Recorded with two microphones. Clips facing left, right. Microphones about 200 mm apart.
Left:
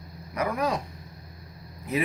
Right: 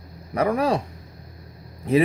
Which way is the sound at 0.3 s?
30° right (ahead or behind).